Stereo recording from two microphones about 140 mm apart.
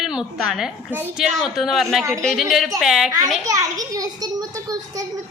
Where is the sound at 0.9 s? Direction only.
15° right (ahead or behind).